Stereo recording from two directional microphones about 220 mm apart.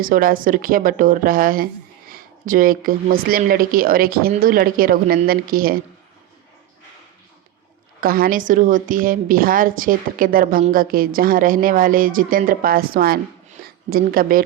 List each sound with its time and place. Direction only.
0.0 s a woman's voice: 40° right (ahead or behind)
8.0 s a woman's voice: 40° right (ahead or behind)